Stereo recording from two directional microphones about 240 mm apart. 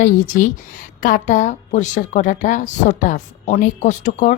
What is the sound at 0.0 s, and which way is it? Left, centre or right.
A woman's voice, left.